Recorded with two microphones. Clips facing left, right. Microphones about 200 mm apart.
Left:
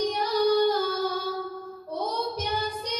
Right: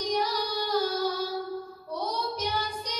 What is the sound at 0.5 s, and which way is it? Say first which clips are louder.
Child singing: left 6 dB; 55° left (ahead or behind).